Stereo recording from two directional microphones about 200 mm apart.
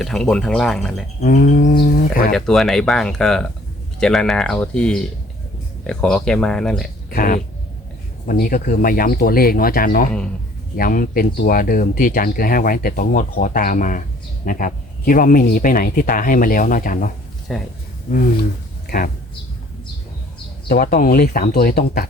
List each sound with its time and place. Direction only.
0.0 s speech: centre (ahead or behind)
1.2 s speech: 40° left (ahead or behind)
2.3 s speech: centre (ahead or behind)
7.1 s speech: 45° left (ahead or behind)
17.5 s speech: centre (ahead or behind)
18.1 s speech: 40° left (ahead or behind)
20.7 s speech: 45° left (ahead or behind)